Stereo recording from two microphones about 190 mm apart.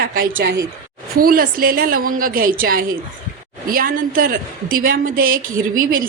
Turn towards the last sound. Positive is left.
turn(degrees=-45)  # may be behind; listen again after turning